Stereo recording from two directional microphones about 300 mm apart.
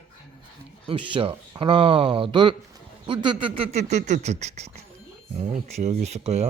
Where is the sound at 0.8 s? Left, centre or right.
Centre.